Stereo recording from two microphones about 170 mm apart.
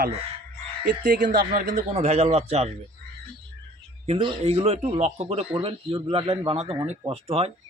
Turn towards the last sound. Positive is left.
turn(degrees=-35)  # may be behind; listen again after turning